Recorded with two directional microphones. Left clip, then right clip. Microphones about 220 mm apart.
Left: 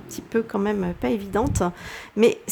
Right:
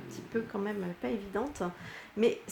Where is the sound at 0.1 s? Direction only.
45° left (ahead or behind).